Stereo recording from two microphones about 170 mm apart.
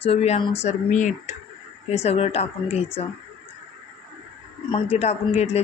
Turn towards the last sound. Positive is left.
turn(degrees=40)  # may be behind; listen again after turning